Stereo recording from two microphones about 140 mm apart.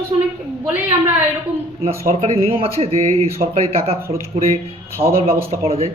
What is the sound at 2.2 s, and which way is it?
A man's voice, 45° right (ahead or behind).